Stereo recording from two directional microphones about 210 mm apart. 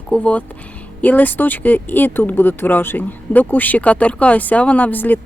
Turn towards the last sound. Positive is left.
turn(degrees=10)  # may be behind; listen again after turning